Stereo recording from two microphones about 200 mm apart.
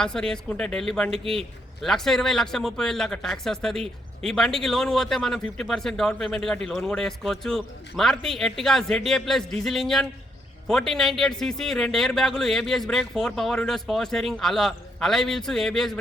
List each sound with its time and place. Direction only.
0.0 s speech: 5° left (ahead or behind)